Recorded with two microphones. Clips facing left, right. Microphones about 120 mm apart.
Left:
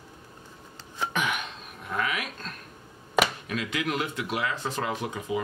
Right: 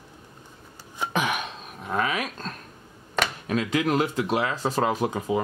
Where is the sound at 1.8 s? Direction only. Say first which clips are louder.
Right 4 dB; 30° right (ahead or behind).